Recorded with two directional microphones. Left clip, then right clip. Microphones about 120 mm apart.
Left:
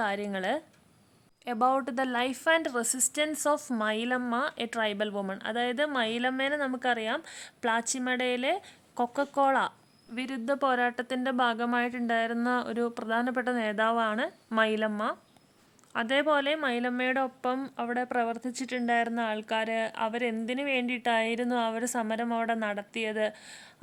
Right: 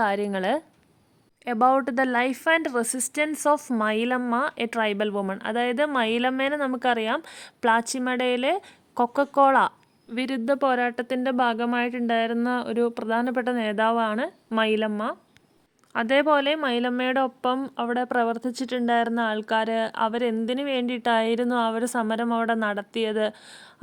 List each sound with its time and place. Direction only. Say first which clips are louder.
0.0 s a woman's voice: right 6 dB; 40° right (ahead or behind); by 15.2 s 25° right (ahead or behind)
15.9 s speech: right 6 dB; 45° right (ahead or behind)